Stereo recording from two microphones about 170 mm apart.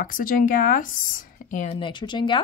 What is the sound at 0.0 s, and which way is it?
Speech, 55° left (ahead or behind).